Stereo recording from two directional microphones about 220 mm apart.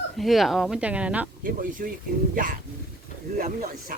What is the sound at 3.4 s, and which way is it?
Speech, 40° right (ahead or behind).